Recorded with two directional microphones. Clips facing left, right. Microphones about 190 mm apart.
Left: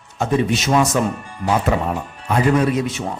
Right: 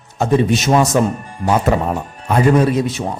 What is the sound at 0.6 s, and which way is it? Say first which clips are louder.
A man's voice: right 3 dB; 40° right (ahead or behind).